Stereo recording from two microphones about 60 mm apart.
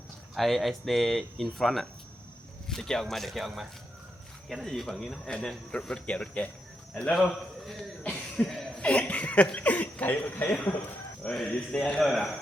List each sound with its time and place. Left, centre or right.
0.3 s speech: centre
5.3 s a man's voice: centre
7.3 s a man's voice: centre
8.1 s cough: centre
8.8 s speech: left
11.2 s a man's voice: centre